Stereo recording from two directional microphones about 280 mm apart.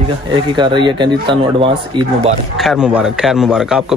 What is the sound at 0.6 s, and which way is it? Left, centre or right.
Speech, centre.